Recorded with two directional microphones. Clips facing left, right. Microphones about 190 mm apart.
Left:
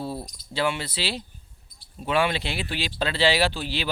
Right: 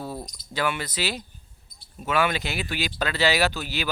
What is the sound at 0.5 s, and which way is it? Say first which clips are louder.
Speech: left 1 dB; 25° left (ahead or behind).